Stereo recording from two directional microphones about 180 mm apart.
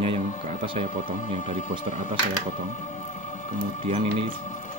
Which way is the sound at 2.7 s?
40° left (ahead or behind).